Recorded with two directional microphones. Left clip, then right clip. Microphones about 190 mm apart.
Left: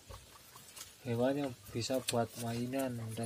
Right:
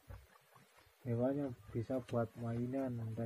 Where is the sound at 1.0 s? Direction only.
20° left (ahead or behind).